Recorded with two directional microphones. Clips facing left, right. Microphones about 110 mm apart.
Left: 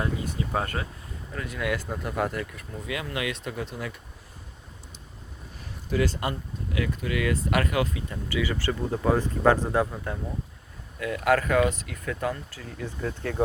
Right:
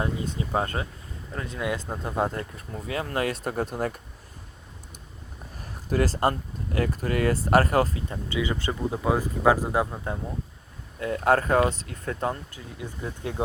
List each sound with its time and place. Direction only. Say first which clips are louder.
0.0 s speech: right 1 dB; 25° right (ahead or behind); by 4.0 s 45° right (ahead or behind)
5.5 s a sound: right 1 dB; 45° right (ahead or behind)
6.7 s speech: right 3 dB; 40° right (ahead or behind)
8.3 s speech: even; 20° right (ahead or behind)
11.0 s speech: right 1 dB; 30° right (ahead or behind)
12.5 s speech: left 2 dB; 15° right (ahead or behind)